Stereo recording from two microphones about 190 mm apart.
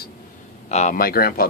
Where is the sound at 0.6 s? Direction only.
40° left (ahead or behind).